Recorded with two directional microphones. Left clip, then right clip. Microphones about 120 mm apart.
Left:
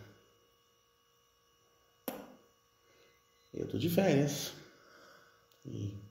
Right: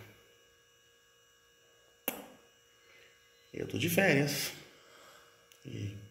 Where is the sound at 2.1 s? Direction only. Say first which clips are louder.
Right 2 dB; 20° left (ahead or behind).